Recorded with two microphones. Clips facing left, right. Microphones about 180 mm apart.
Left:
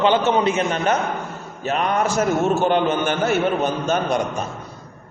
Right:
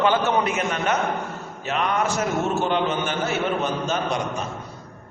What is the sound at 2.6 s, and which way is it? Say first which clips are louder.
A man's voice: left 4 dB; 50° left (ahead or behind).